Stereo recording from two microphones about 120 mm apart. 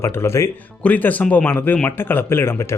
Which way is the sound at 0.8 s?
15° left (ahead or behind).